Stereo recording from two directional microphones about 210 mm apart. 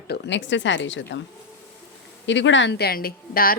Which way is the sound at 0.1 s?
60° left (ahead or behind).